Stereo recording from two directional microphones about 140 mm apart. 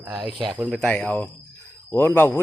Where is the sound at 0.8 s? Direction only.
10° left (ahead or behind).